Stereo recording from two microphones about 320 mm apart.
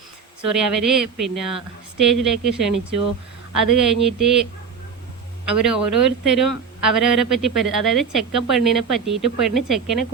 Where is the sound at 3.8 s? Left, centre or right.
Centre.